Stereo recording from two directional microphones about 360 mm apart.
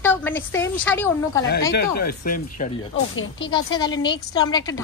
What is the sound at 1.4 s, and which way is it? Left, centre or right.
Speech, left.